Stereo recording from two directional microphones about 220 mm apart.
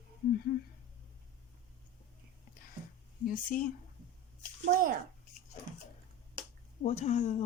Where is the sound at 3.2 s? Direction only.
40° left (ahead or behind).